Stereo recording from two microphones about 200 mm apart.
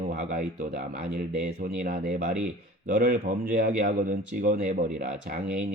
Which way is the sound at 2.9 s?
45° right (ahead or behind).